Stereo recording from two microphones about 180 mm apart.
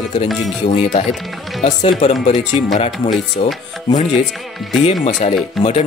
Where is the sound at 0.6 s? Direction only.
35° left (ahead or behind).